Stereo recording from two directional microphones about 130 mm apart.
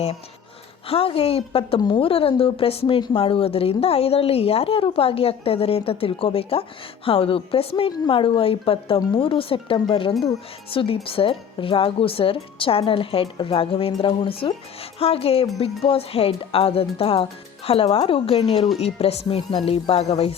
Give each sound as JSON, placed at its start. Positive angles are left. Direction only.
{"t": 0.9, "sound": "a woman's voice", "side_deg": 45}